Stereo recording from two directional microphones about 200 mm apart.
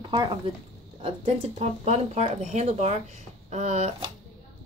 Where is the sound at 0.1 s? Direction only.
20° right (ahead or behind).